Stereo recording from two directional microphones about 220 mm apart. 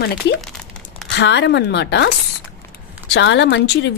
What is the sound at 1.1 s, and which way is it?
Speech, 50° left (ahead or behind).